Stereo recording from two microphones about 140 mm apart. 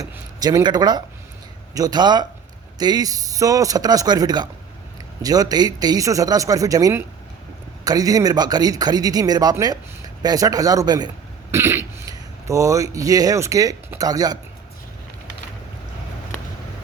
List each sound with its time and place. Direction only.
0.0 s speech: 25° right (ahead or behind)
11.5 s speech: 20° right (ahead or behind)